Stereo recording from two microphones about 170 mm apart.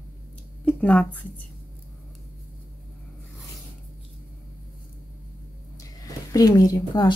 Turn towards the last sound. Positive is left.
turn(degrees=25)  # may be behind; listen again after turning